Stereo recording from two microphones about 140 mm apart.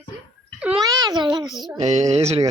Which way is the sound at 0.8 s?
25° right (ahead or behind).